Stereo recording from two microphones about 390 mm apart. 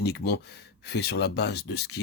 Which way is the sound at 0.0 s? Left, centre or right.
Left.